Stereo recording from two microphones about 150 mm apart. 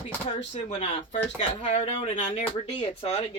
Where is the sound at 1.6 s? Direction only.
45° left (ahead or behind).